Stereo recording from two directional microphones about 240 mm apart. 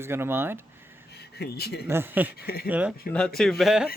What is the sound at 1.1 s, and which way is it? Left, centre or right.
Speech, left.